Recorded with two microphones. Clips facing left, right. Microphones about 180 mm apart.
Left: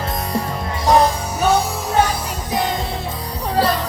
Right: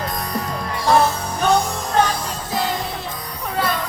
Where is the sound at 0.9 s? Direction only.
15° left (ahead or behind).